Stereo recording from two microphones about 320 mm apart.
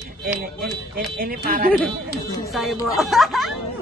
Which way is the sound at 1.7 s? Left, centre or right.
Centre.